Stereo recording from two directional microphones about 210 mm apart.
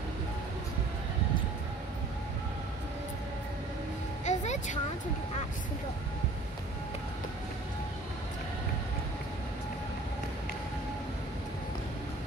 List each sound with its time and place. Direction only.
4.2 s vehicle: 35° left (ahead or behind)